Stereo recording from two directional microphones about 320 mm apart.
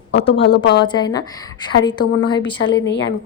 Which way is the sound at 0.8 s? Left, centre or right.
Centre.